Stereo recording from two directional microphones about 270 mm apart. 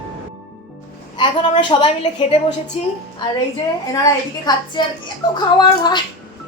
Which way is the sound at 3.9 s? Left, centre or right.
Centre.